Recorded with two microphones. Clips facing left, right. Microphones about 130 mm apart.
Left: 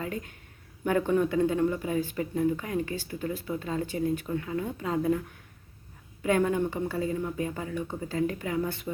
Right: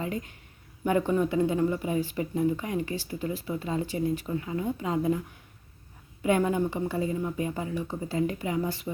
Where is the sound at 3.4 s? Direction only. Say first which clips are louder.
Right 1 dB; 5° right (ahead or behind).